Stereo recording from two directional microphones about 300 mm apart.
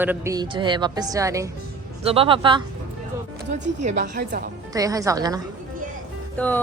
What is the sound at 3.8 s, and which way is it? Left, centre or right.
Speech, right.